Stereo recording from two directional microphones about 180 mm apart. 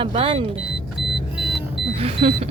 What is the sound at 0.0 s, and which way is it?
Speech, 30° right (ahead or behind).